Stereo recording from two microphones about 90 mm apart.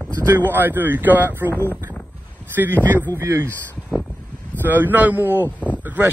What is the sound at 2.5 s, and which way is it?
Speech, 25° right (ahead or behind).